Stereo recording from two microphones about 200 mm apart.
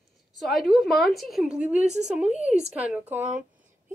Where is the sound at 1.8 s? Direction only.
35° right (ahead or behind).